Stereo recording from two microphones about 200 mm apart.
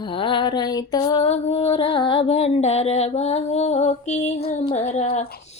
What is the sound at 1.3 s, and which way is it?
Music, 30° left (ahead or behind).